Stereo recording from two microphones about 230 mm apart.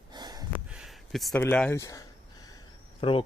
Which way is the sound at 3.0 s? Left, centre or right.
Left.